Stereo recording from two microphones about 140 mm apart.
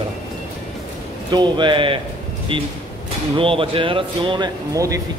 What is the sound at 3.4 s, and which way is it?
Speech, 40° right (ahead or behind).